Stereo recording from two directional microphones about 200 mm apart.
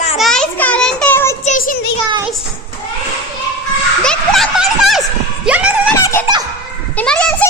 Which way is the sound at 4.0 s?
Centre (ahead or behind).